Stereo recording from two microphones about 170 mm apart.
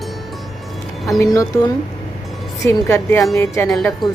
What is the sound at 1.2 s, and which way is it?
Speech, 20° left (ahead or behind).